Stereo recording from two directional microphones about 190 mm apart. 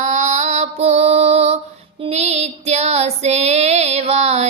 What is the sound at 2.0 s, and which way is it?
Female singing, 35° right (ahead or behind).